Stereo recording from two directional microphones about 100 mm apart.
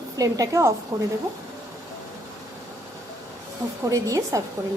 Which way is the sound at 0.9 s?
45° right (ahead or behind).